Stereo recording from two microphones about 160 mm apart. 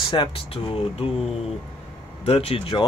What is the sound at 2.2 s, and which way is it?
Speech, 40° left (ahead or behind).